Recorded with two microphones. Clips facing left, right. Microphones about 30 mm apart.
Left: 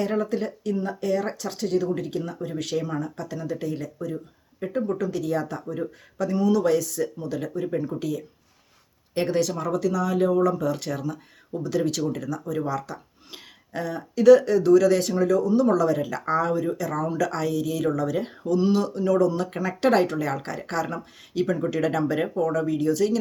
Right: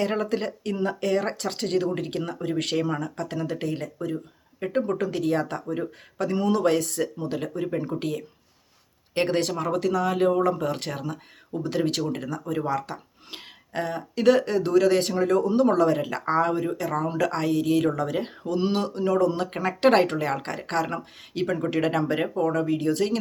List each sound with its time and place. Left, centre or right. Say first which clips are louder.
0.0 s speech: even; right